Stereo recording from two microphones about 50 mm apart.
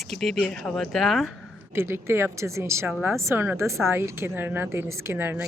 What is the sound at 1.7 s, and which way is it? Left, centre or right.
A woman's voice, right.